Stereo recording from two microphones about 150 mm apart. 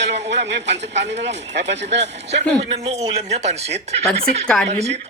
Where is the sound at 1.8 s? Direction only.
50° right (ahead or behind).